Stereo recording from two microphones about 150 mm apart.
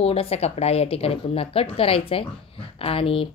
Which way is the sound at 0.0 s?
40° left (ahead or behind).